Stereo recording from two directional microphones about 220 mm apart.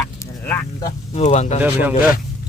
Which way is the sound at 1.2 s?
30° left (ahead or behind).